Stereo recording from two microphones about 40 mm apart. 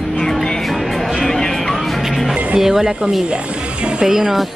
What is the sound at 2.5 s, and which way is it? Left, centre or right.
Speech, centre.